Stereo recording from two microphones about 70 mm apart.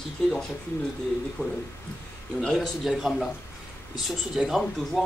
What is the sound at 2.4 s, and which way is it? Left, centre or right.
Speech, centre.